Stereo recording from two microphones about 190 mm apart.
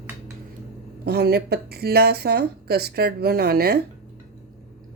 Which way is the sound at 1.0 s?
55° right (ahead or behind).